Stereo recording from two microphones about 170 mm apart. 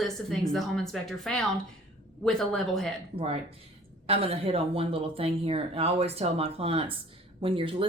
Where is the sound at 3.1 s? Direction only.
35° right (ahead or behind).